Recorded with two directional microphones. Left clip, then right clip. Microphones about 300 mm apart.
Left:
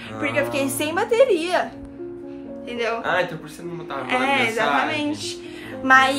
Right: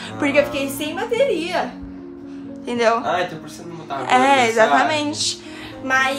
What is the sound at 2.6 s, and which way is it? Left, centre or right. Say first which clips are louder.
Speech: right 7 dB; centre.